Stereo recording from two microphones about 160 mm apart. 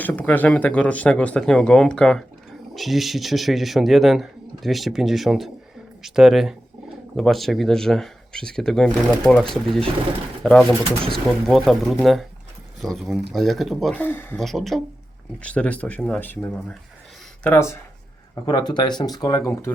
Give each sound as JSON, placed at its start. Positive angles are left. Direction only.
{"t": 0.0, "sound": "speech", "side_deg": 10}
{"t": 14.4, "sound": "speech", "side_deg": 0}
{"t": 18.4, "sound": "speech", "side_deg": 25}